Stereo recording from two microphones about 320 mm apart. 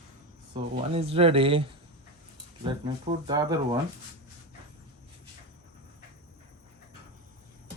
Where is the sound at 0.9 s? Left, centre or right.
Centre.